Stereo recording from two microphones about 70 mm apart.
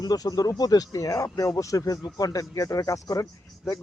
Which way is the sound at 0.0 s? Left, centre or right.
Left.